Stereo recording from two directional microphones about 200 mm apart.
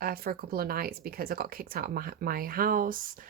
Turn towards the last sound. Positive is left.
turn(degrees=-45)  # may be behind; listen again after turning